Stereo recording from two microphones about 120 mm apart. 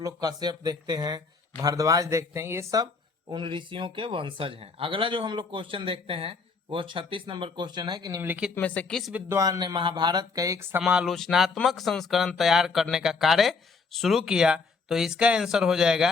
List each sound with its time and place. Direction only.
0.0 s speech: 35° right (ahead or behind)
8.2 s speech: 15° right (ahead or behind)
8.5 s speech: 10° left (ahead or behind)
9.3 s speech: 30° right (ahead or behind)
10.8 s speech: 5° right (ahead or behind)